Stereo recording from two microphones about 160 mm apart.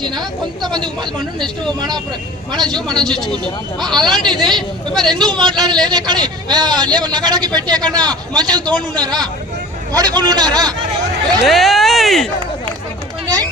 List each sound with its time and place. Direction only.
0.0 s a man's voice: 25° right (ahead or behind)
3.0 s speech: centre (ahead or behind)
3.2 s a man's voice: 30° right (ahead or behind)
3.8 s speech: 5° left (ahead or behind)
5.0 s a man's voice: 25° right (ahead or behind)
5.3 s speech: 5° left (ahead or behind)
5.5 s a man's voice: 25° right (ahead or behind)
11.4 s speech: centre (ahead or behind)
13.2 s a sound: 25° right (ahead or behind)